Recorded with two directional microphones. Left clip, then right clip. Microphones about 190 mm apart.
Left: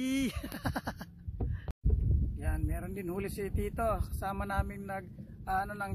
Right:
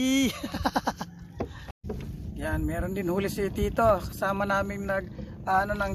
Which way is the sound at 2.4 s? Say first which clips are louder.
Right 12 dB; 5° left (ahead or behind).